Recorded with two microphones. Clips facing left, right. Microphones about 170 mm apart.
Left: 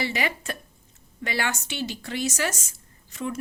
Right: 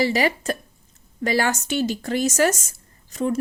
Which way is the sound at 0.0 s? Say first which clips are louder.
Right 8 dB; 40° right (ahead or behind).